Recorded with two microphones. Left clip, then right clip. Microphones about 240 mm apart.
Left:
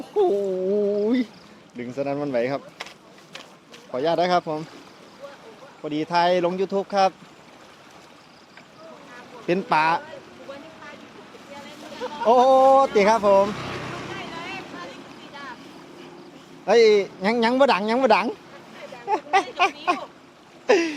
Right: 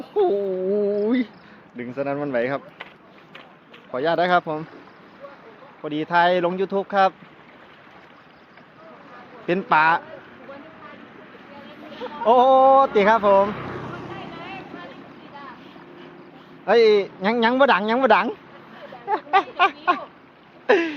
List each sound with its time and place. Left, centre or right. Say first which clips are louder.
0.0 s a sound: even; centre
1.7 s speech: right 1 dB; centre
3.9 s speech: right 1 dB; centre
5.8 s speech: right 2 dB; centre
9.5 s speech: right 3 dB; centre
11.9 s speech: right 1 dB; centre
13.4 s vehicle: right 1 dB; centre
16.6 s speech: even; centre
19.0 s a sound: right 1 dB; centre